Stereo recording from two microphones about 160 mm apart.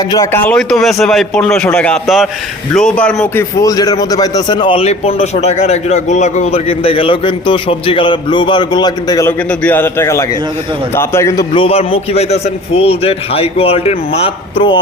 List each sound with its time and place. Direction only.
0.1 s a man's voice: 15° left (ahead or behind)
0.5 s a man's voice: centre (ahead or behind)
3.6 s a man's voice: 25° left (ahead or behind)
9.5 s a man's voice: 10° left (ahead or behind)
11.5 s a man's voice: 35° left (ahead or behind)